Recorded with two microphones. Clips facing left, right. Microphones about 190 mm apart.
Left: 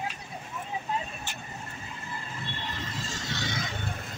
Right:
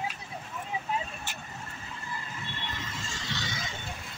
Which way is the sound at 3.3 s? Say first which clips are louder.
Left 3 dB; 50° left (ahead or behind).